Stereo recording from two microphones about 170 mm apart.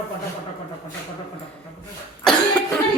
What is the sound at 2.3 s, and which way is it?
Cough, 5° left (ahead or behind).